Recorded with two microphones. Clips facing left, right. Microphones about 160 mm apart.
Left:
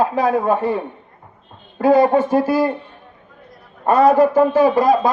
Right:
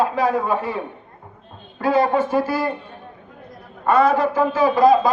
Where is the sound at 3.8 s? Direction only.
40° left (ahead or behind).